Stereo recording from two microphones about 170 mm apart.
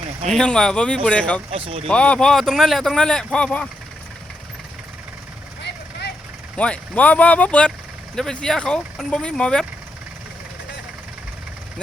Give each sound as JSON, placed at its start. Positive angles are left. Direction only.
{"t": 0.3, "sound": "speech", "side_deg": 5}
{"t": 1.5, "sound": "speech", "side_deg": -35}
{"t": 1.9, "sound": "speech", "side_deg": 5}
{"t": 5.6, "sound": "vehicle", "side_deg": 80}
{"t": 6.6, "sound": "speech", "side_deg": 5}